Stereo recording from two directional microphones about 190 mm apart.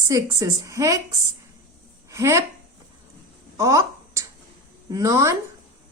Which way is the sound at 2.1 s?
15° right (ahead or behind).